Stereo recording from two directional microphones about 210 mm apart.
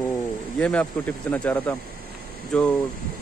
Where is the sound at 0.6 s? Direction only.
5° left (ahead or behind).